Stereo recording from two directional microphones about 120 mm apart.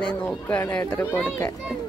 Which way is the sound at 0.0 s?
5° left (ahead or behind).